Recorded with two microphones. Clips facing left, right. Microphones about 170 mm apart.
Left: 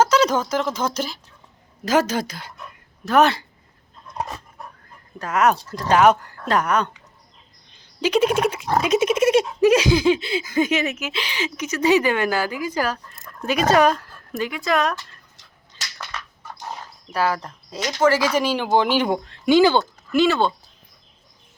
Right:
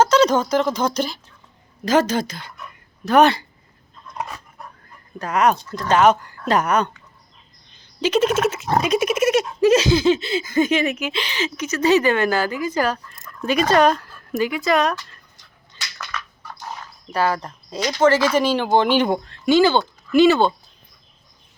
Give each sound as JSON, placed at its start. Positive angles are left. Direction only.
{"t": 0.0, "sound": "a woman's voice", "side_deg": 10}
{"t": 5.2, "sound": "a woman's voice", "side_deg": 5}
{"t": 8.0, "sound": "speech", "side_deg": 10}
{"t": 9.6, "sound": "a woman's voice", "side_deg": 15}
{"t": 16.0, "sound": "crushing", "side_deg": 25}
{"t": 17.1, "sound": "a woman's voice", "side_deg": 5}
{"t": 20.1, "sound": "speech", "side_deg": 0}